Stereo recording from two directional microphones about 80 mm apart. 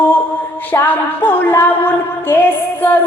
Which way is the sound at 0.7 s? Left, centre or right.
Left.